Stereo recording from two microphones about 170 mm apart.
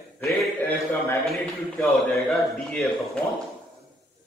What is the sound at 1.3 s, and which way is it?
Speech, centre (ahead or behind).